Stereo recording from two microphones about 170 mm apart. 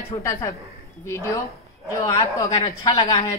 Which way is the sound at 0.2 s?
15° left (ahead or behind).